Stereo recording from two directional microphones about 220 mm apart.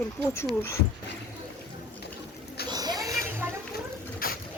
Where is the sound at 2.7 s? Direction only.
20° right (ahead or behind).